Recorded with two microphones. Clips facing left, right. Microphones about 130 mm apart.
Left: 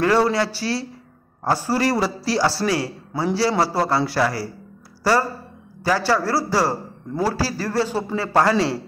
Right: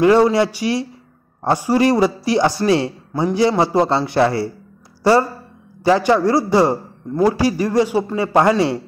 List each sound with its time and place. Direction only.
0.0 s a man's voice: 20° right (ahead or behind)